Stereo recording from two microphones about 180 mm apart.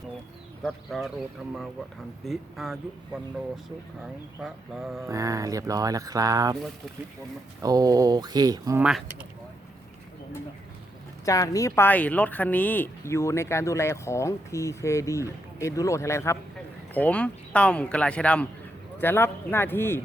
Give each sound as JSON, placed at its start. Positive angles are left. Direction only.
{"t": 0.6, "sound": "speech", "side_deg": 0}
{"t": 2.2, "sound": "speech", "side_deg": 0}
{"t": 5.0, "sound": "speech", "side_deg": -20}
{"t": 7.6, "sound": "speech", "side_deg": -20}
{"t": 8.8, "sound": "speech", "side_deg": -5}
{"t": 11.3, "sound": "a woman's voice", "side_deg": 20}